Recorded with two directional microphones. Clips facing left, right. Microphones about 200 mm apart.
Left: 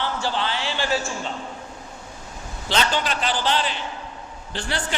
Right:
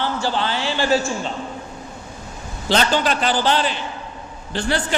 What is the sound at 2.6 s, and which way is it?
A man's voice, 40° right (ahead or behind).